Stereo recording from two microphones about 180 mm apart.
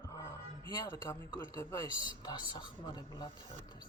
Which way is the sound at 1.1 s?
20° left (ahead or behind).